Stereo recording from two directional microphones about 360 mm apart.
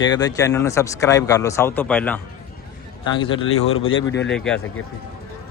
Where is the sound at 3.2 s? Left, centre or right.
Centre.